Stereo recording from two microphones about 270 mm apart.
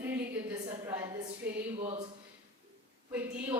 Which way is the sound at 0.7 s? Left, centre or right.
Centre.